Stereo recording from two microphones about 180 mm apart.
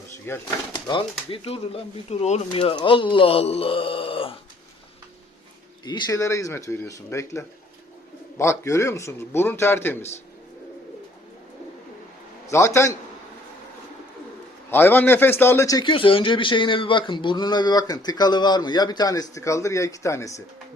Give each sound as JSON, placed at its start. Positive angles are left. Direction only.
{"t": 0.3, "sound": "a man's voice", "side_deg": 25}
{"t": 2.5, "sound": "a man's voice", "side_deg": 30}
{"t": 5.8, "sound": "a man's voice", "side_deg": 25}
{"t": 12.5, "sound": "a man's voice", "side_deg": 15}
{"t": 14.7, "sound": "a man's voice", "side_deg": 10}